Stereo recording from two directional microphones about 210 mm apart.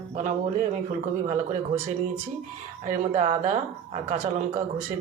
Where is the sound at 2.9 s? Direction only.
35° right (ahead or behind).